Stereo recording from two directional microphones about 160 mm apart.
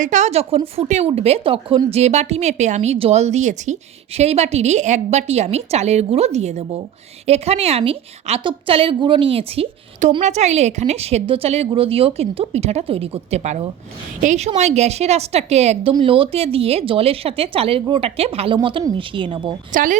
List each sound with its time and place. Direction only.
0.0 s a woman's voice: 50° right (ahead or behind); by 19.5 s 30° right (ahead or behind)
19.7 s speech: 55° right (ahead or behind)